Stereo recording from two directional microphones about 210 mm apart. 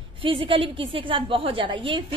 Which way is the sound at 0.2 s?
25° right (ahead or behind).